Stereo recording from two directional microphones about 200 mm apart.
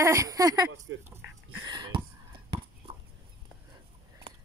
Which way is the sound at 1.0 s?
10° right (ahead or behind).